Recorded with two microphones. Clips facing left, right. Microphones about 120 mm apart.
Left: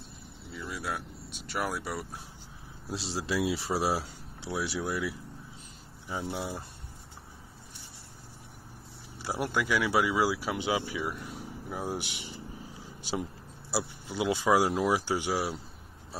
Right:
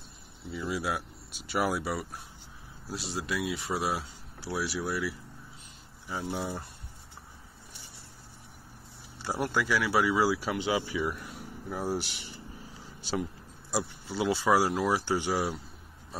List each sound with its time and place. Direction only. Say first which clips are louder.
0.7 s speech: right 4 dB; 5° right (ahead or behind)
3.1 s speech: left 3 dB; 30° left (ahead or behind)
6.0 s speech: right 1 dB; 5° left (ahead or behind)
9.2 s speech: right 1 dB; 15° left (ahead or behind)
12.8 s a sound: right 1 dB; 15° left (ahead or behind)
13.7 s speech: right 1 dB; 15° left (ahead or behind)